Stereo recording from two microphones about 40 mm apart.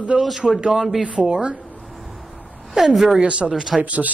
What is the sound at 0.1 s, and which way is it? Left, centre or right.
Speech, right.